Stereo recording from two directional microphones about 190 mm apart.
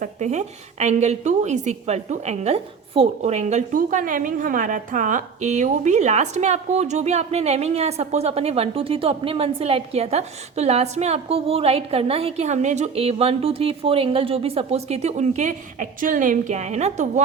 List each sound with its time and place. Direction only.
0.0 s a woman's voice: 35° right (ahead or behind)